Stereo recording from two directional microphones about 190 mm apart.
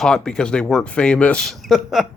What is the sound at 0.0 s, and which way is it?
Speech, 5° left (ahead or behind).